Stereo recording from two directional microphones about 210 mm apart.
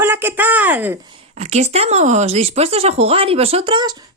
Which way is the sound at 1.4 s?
30° right (ahead or behind).